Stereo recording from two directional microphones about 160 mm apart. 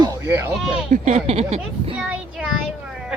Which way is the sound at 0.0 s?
15° right (ahead or behind).